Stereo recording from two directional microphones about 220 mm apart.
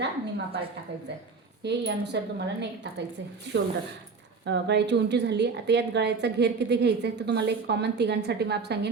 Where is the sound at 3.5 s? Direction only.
55° right (ahead or behind).